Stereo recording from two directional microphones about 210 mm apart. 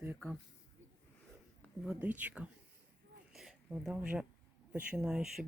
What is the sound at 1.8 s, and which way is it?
Speech, 5° right (ahead or behind).